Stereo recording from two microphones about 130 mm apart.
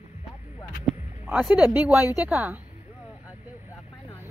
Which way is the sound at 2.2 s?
15° right (ahead or behind).